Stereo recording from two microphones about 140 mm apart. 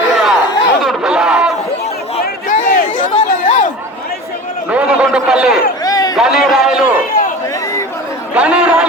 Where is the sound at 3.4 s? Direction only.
65° left (ahead or behind).